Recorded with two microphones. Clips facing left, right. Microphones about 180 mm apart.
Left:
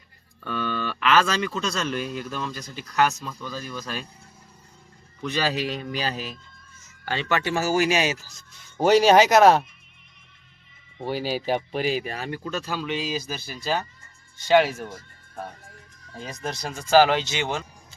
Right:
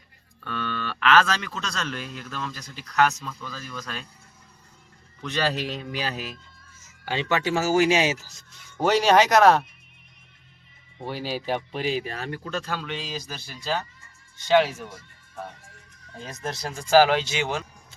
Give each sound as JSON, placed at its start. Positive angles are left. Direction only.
{"t": 0.4, "sound": "speech", "side_deg": 5}
{"t": 5.2, "sound": "speech", "side_deg": 5}
{"t": 6.8, "sound": "speech", "side_deg": -15}
{"t": 8.8, "sound": "speech", "side_deg": 5}
{"t": 11.0, "sound": "speech", "side_deg": 0}
{"t": 16.2, "sound": "speech", "side_deg": 0}